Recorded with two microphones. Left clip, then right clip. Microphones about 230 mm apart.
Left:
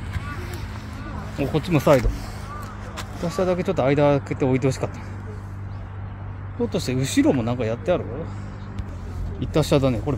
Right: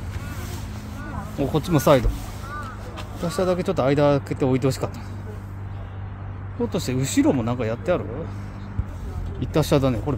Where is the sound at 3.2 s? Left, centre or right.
Centre.